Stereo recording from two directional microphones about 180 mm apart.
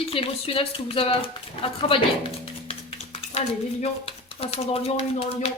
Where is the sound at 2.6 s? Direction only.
35° left (ahead or behind).